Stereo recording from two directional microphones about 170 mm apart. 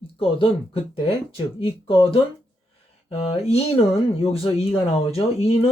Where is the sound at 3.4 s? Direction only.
35° left (ahead or behind).